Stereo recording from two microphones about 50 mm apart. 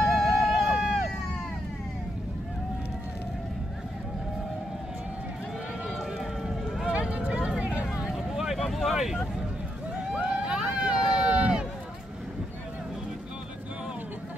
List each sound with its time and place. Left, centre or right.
0.1 s run: centre
6.1 s run: centre
6.9 s a sound: right
7.6 s vehicle: right
8.1 s vehicle: centre
8.6 s a sound: centre
10.1 s vehicle: centre
11.0 s run: centre